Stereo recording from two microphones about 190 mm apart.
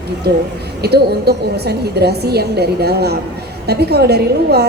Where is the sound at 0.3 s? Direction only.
60° right (ahead or behind).